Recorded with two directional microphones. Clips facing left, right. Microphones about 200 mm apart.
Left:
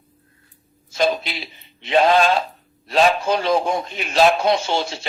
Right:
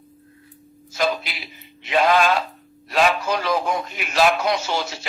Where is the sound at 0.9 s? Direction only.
25° left (ahead or behind).